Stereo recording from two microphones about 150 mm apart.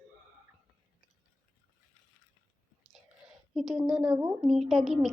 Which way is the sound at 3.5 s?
Centre (ahead or behind).